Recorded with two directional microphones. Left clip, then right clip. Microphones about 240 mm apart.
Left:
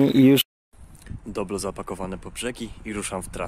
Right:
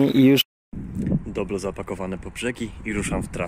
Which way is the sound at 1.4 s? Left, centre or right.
Centre.